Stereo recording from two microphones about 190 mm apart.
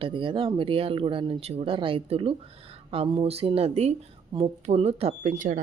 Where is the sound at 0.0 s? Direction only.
25° right (ahead or behind).